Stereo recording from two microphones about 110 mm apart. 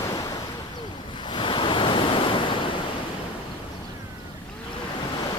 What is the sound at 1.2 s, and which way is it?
Waves, 50° left (ahead or behind).